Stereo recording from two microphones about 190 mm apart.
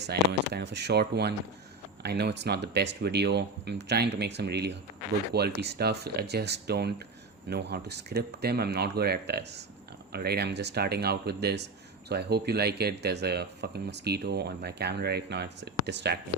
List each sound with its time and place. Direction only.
0.0 s speech: 60° right (ahead or behind)